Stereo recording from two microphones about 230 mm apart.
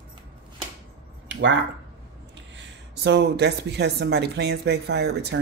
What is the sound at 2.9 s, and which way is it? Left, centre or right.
Speech, right.